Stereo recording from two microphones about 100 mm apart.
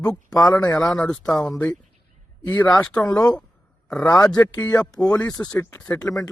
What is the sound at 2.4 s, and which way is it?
Speech, 40° left (ahead or behind).